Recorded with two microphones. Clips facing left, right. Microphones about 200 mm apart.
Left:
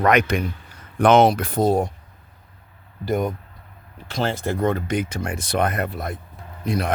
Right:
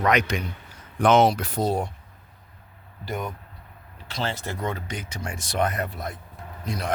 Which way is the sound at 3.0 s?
45° left (ahead or behind).